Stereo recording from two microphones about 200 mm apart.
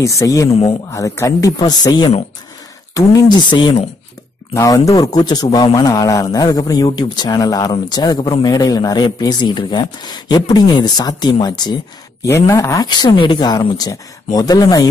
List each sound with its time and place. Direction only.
0.0 s speech: 15° left (ahead or behind)